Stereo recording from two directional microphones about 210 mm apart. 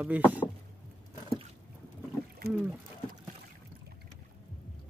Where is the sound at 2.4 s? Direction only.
50° right (ahead or behind).